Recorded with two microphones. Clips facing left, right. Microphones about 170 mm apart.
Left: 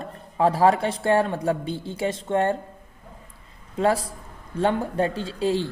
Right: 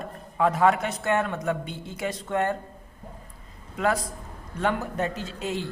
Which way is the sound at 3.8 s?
30° left (ahead or behind).